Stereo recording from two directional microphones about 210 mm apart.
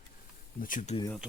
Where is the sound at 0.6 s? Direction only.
40° left (ahead or behind).